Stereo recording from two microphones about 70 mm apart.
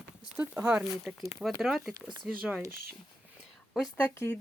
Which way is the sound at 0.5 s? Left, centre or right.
Right.